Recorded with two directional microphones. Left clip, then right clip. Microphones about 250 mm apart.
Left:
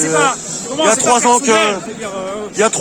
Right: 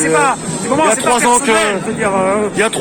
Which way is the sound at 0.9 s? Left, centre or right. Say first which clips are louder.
Left 3 dB; centre.